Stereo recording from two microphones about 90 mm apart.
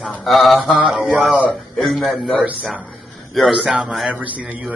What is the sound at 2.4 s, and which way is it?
Speech, 15° right (ahead or behind).